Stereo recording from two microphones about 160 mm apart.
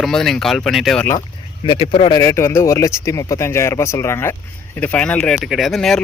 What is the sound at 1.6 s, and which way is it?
Speech, 35° left (ahead or behind).